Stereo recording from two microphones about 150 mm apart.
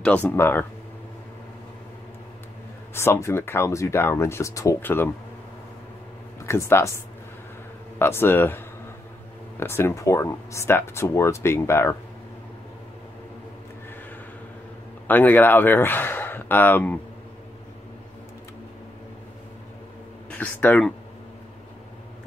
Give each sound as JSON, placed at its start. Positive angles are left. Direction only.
{"t": 0.0, "sound": "speech", "side_deg": 10}
{"t": 2.9, "sound": "speech", "side_deg": 15}
{"t": 6.4, "sound": "speech", "side_deg": 20}
{"t": 8.0, "sound": "speech", "side_deg": 15}
{"t": 15.0, "sound": "speech", "side_deg": 10}
{"t": 20.2, "sound": "speech", "side_deg": 10}